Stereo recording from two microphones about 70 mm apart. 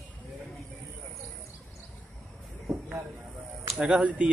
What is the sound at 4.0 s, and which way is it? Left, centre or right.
Speech, centre.